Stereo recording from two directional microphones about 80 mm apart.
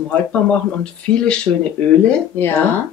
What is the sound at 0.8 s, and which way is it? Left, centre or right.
Speech, centre.